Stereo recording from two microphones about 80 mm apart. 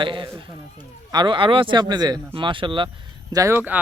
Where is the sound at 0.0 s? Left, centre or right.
Right.